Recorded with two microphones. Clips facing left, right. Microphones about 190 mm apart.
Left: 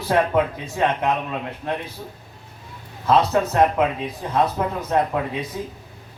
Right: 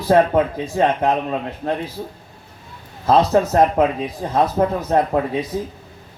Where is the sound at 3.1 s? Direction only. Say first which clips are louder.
Right 3 dB; 35° right (ahead or behind).